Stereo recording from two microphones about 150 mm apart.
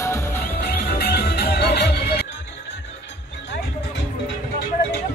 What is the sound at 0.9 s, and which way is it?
Music, 90° left.